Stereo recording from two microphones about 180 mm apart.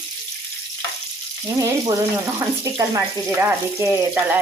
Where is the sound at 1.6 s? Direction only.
20° right (ahead or behind).